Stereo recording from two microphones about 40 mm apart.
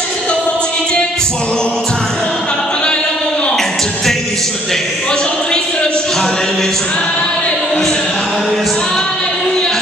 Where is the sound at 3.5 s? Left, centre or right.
Centre.